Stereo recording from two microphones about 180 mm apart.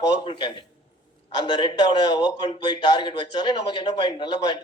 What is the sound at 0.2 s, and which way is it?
A man's voice, 25° left (ahead or behind).